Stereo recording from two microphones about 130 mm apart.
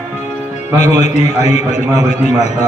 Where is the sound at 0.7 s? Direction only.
60° left (ahead or behind).